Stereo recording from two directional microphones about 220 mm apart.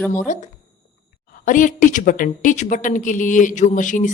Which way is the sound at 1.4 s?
35° left (ahead or behind).